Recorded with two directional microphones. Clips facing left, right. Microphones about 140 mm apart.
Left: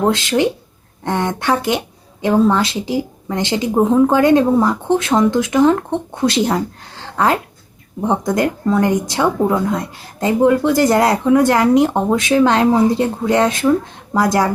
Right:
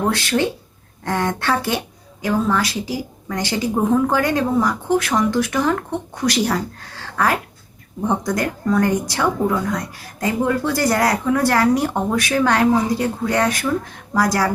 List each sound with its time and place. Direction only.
0.1 s a woman's voice: 20° left (ahead or behind)